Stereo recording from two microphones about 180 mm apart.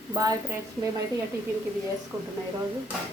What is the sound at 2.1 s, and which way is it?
Speech, 15° right (ahead or behind).